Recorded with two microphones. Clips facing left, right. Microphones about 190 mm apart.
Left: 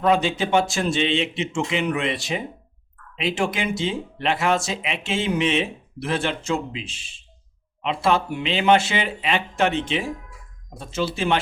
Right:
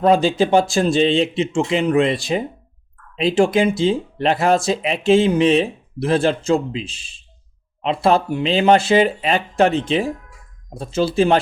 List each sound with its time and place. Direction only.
0.0 s speech: 35° right (ahead or behind)